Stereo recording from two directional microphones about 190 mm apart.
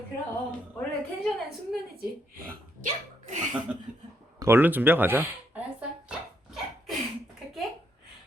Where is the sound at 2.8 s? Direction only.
40° right (ahead or behind).